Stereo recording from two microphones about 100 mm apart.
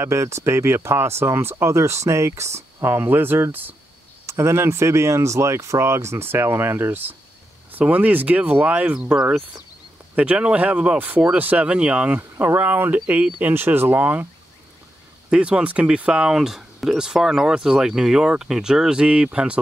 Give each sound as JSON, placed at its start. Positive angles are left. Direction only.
{"t": 0.0, "sound": "speech", "side_deg": -30}
{"t": 15.2, "sound": "speech", "side_deg": -10}